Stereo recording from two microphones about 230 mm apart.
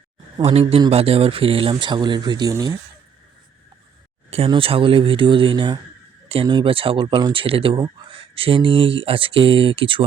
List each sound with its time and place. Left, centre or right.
0.3 s speech: right
4.3 s speech: right